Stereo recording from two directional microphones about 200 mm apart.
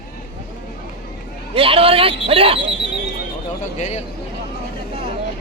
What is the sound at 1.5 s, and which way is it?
Speech, 25° right (ahead or behind).